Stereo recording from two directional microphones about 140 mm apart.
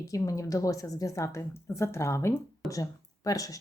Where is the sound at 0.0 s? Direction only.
25° left (ahead or behind).